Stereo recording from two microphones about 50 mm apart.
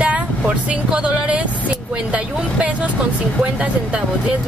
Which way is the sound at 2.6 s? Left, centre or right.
Right.